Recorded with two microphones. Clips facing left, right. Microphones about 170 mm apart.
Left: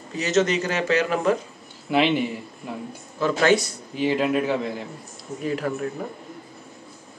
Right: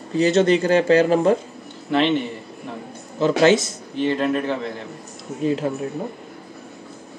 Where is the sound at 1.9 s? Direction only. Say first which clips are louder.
Right 1 dB; 10° left (ahead or behind).